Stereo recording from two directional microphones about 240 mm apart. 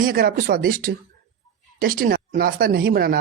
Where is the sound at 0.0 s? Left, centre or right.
Right.